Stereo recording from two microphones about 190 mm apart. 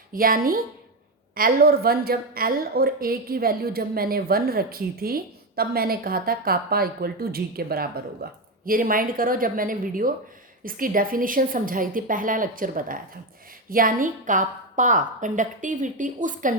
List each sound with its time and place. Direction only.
0.1 s a woman's voice: 50° right (ahead or behind)